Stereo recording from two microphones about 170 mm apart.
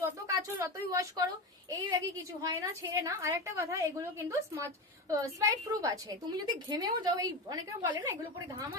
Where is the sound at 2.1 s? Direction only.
15° right (ahead or behind).